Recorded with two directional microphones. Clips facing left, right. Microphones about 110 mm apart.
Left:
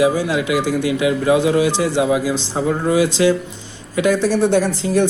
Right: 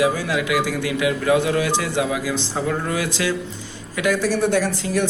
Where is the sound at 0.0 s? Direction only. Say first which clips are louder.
Left 4 dB; 20° left (ahead or behind).